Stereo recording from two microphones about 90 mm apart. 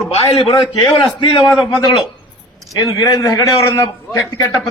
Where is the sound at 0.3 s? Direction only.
60° left (ahead or behind).